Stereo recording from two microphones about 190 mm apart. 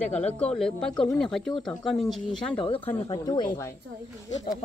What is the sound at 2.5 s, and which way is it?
Speech, 30° left (ahead or behind).